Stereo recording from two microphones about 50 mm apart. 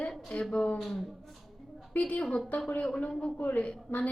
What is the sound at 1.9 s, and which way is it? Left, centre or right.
Speech, left.